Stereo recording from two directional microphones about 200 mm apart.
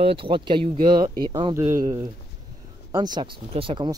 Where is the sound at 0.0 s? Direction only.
25° right (ahead or behind).